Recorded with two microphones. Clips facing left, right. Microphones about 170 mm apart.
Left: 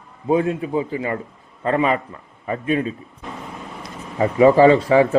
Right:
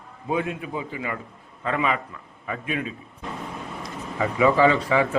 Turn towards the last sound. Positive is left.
turn(degrees=35)  # may be behind; listen again after turning